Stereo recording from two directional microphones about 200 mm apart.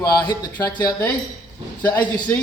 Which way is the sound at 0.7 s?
20° left (ahead or behind).